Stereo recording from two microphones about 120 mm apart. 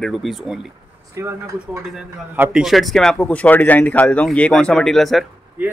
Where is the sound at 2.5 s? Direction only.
Centre (ahead or behind).